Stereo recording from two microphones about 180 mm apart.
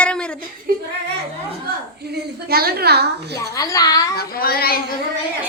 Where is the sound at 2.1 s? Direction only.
60° right (ahead or behind).